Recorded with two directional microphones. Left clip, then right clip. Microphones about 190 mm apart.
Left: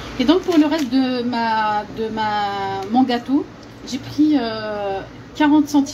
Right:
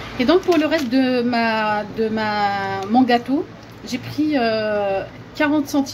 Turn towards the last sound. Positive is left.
turn(degrees=-25)  # may be behind; listen again after turning